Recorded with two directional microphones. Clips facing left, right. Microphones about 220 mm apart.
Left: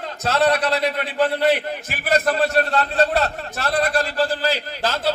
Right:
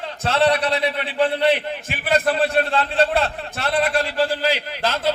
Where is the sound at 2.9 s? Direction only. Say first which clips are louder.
Even; 30° right (ahead or behind).